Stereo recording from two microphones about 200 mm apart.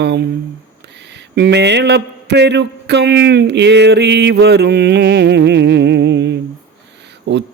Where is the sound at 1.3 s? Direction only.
55° right (ahead or behind).